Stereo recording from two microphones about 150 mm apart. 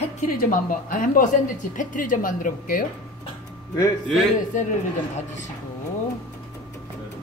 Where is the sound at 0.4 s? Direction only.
65° left (ahead or behind).